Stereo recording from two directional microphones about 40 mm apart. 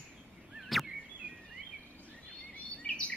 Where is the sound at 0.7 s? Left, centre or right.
Centre.